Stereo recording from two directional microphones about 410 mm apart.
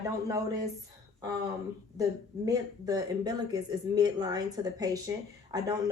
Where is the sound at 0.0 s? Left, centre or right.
Centre.